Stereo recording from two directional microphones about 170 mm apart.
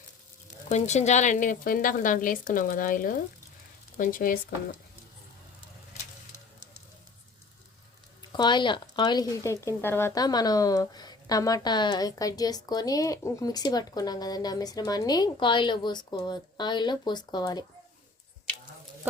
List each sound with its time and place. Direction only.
0.7 s a woman's voice: 40° left (ahead or behind)
8.2 s speech: 25° left (ahead or behind)